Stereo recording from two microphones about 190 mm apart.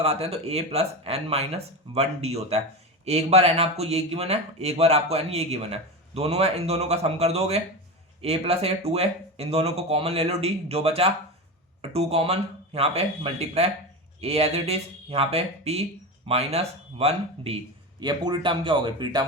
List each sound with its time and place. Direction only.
0.0 s speech: 30° right (ahead or behind)
18.0 s speech: 20° right (ahead or behind)